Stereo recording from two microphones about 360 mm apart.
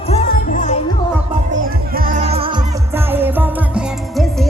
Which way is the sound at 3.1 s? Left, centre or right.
Centre.